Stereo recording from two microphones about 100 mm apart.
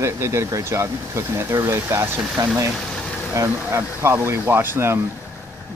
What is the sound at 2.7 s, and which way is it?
Vehicle, 5° left (ahead or behind).